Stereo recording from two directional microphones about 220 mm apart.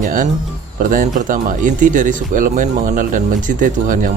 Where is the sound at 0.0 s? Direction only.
35° right (ahead or behind).